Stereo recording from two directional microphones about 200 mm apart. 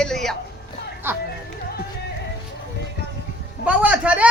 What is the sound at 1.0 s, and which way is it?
Speech, 10° right (ahead or behind).